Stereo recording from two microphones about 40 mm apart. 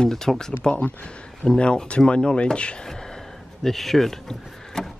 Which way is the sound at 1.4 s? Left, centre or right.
Left.